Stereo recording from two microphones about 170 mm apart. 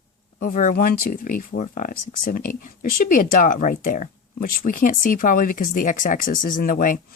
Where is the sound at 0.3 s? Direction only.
50° left (ahead or behind).